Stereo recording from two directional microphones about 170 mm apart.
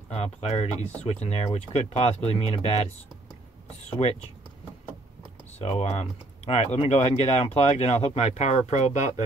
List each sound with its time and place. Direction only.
0.1 s speech: 40° left (ahead or behind)
4.0 s speech: 40° left (ahead or behind)
5.6 s speech: 40° left (ahead or behind)